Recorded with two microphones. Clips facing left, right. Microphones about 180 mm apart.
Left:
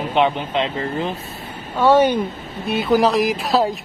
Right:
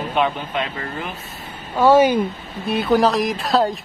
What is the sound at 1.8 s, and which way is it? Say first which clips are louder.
Speech: right 1 dB; 10° right (ahead or behind).